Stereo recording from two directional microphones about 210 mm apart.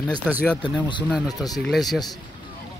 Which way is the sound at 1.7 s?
Centre (ahead or behind).